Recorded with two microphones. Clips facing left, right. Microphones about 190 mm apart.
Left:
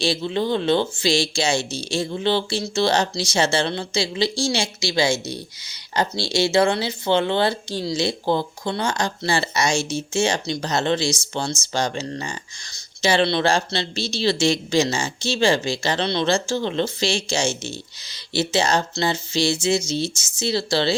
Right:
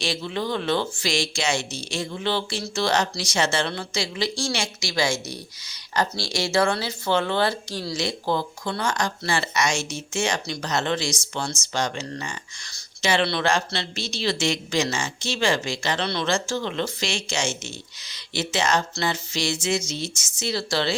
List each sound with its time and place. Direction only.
0.0 s speech: 30° left (ahead or behind)